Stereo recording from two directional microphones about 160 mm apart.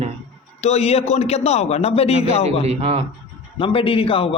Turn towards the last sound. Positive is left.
turn(degrees=35)  # may be behind; listen again after turning